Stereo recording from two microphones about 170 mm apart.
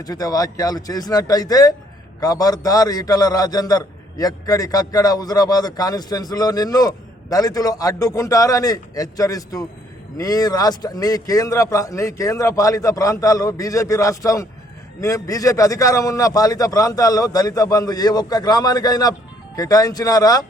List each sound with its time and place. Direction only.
0.0 s a man's voice: 20° left (ahead or behind)